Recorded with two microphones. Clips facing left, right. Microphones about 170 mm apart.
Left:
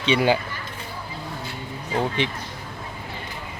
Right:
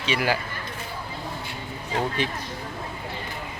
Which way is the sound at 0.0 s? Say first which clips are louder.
Left 5 dB; 30° left (ahead or behind).